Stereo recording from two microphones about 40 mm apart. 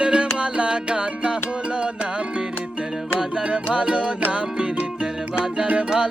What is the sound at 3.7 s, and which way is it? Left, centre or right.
Music, right.